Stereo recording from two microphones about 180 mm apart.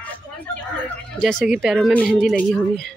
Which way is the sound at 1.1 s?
Centre (ahead or behind).